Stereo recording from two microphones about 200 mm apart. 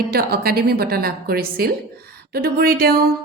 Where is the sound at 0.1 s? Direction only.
50° right (ahead or behind).